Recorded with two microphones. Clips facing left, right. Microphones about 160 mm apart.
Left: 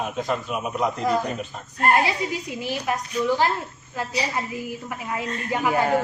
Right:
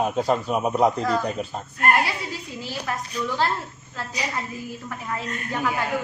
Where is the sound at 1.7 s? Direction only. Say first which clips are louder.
Left 2 dB; 25° left (ahead or behind).